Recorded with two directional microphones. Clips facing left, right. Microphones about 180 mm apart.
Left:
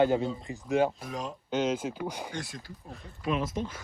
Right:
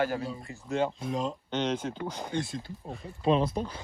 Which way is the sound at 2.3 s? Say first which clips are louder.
Right 6 dB; 20° right (ahead or behind).